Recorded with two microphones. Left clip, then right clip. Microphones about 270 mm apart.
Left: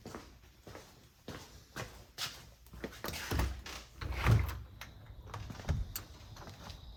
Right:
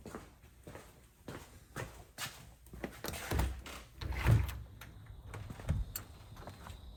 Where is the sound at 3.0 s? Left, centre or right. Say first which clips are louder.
Left 2 dB; centre.